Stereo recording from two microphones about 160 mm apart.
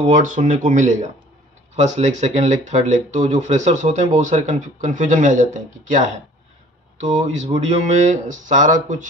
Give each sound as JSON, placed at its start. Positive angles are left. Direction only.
{"t": 0.1, "sound": "speech", "side_deg": -55}